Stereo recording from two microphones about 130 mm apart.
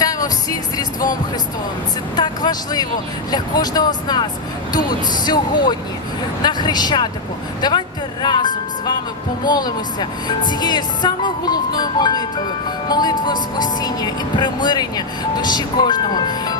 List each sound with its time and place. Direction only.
0.0 s music: 30° left (ahead or behind)
2.1 s speech: 35° left (ahead or behind)